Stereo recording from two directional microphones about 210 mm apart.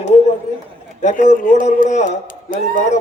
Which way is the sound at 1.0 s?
35° left (ahead or behind).